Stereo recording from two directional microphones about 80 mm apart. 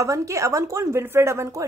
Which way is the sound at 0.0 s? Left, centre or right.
Right.